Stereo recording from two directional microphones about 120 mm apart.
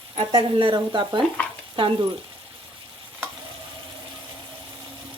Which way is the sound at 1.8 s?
45° right (ahead or behind).